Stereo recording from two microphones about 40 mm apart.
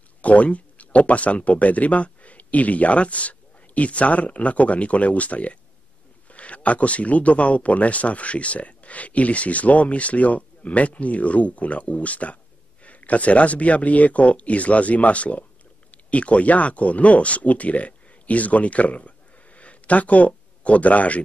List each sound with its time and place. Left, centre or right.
0.2 s speech: left